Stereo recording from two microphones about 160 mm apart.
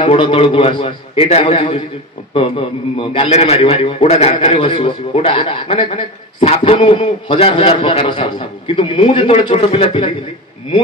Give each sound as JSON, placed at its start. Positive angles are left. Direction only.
{"t": 0.0, "sound": "a man's voice", "side_deg": 35}